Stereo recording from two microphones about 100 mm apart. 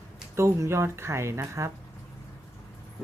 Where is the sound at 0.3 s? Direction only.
30° right (ahead or behind).